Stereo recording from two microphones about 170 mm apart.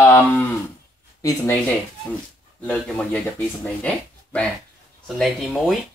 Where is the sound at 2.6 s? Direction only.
5° left (ahead or behind).